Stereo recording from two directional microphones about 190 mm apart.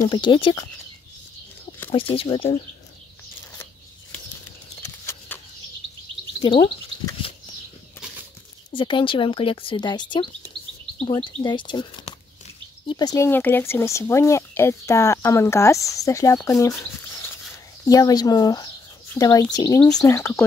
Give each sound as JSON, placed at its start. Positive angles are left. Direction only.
{"t": 0.0, "sound": "speech", "side_deg": 25}
{"t": 1.9, "sound": "speech", "side_deg": 30}
{"t": 4.8, "sound": "a sound", "side_deg": 15}
{"t": 6.4, "sound": "a sound", "side_deg": 25}
{"t": 8.7, "sound": "speech", "side_deg": 25}
{"t": 17.8, "sound": "speech", "side_deg": 20}